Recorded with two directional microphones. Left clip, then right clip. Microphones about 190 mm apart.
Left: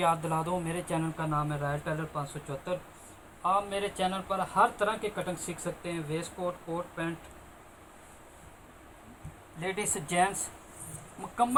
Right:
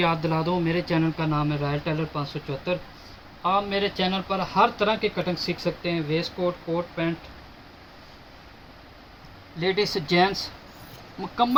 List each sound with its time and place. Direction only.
0.0 s speech: 10° left (ahead or behind)
9.6 s speech: 10° left (ahead or behind)